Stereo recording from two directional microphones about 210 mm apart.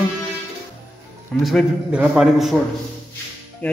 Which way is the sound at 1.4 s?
5° right (ahead or behind).